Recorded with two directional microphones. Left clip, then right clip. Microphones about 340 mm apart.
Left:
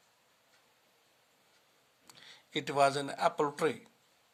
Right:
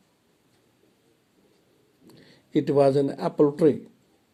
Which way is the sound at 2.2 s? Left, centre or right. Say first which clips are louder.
Left 3 dB; centre.